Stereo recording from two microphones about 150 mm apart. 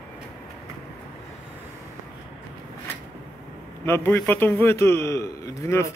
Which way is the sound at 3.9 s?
15° left (ahead or behind).